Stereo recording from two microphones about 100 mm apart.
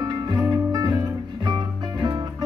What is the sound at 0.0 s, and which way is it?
Music, 40° right (ahead or behind).